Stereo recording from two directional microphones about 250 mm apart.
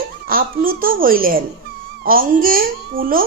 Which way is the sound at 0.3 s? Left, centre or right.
Right.